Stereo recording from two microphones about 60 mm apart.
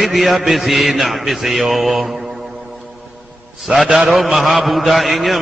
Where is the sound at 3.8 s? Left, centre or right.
Centre.